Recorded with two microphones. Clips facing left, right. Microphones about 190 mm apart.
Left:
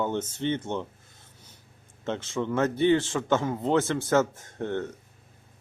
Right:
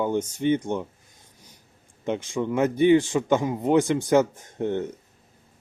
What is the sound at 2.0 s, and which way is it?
Speech, 15° right (ahead or behind).